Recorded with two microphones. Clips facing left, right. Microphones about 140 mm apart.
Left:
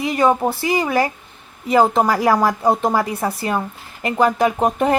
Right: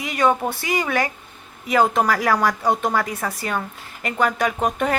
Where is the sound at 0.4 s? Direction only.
30° left (ahead or behind).